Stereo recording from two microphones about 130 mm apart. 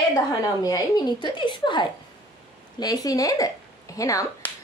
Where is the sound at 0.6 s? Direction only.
30° left (ahead or behind).